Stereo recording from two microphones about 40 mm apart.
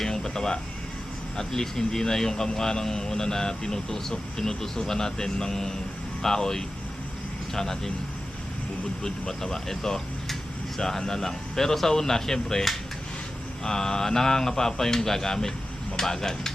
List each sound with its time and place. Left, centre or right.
0.0 s a sound: centre
1.4 s speech: centre
9.0 s speech: centre